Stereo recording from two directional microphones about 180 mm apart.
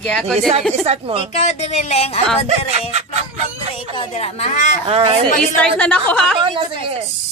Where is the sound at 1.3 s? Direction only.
40° left (ahead or behind).